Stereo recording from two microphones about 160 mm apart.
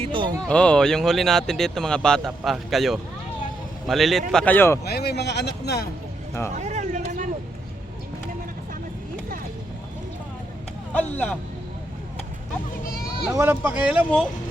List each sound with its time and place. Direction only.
0.0 s speech: 30° right (ahead or behind)
0.4 s speech: 5° left (ahead or behind)
4.9 s speech: 90° left
6.5 s a sound: 50° right (ahead or behind)
10.9 s speech: 10° left (ahead or behind)
13.3 s speech: 15° right (ahead or behind)